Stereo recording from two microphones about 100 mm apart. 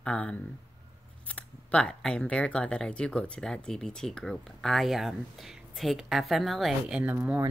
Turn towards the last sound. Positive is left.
turn(degrees=-20)  # may be behind; listen again after turning